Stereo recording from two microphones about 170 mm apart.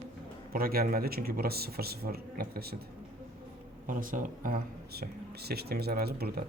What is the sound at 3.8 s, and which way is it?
Speech, 55° right (ahead or behind).